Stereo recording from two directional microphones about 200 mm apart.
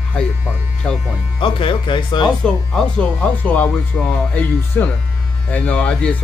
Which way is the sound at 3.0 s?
10° left (ahead or behind).